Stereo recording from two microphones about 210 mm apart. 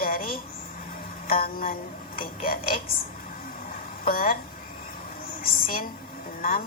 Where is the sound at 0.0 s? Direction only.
40° left (ahead or behind).